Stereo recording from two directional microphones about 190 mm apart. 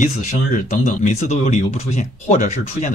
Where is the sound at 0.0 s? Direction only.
40° left (ahead or behind).